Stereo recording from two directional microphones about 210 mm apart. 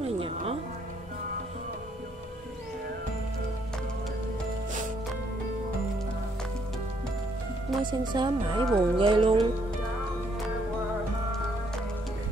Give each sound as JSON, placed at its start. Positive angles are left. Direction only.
{"t": 0.2, "sound": "music", "side_deg": -30}
{"t": 7.8, "sound": "speech", "side_deg": -20}